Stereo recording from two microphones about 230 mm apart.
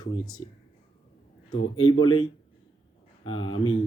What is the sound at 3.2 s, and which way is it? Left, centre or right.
Speech, left.